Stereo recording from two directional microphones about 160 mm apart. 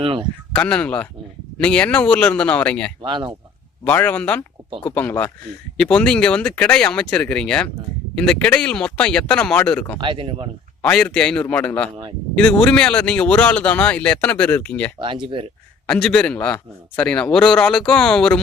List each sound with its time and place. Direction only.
0.0 s speech: 30° right (ahead or behind)
0.5 s speech: 5° left (ahead or behind)
3.0 s speech: 30° right (ahead or behind)
3.8 s speech: 10° left (ahead or behind)
10.0 s speech: 30° right (ahead or behind)
10.8 s speech: 5° left (ahead or behind)
14.9 s speech: 30° right (ahead or behind)
15.9 s a man's voice: 5° left (ahead or behind)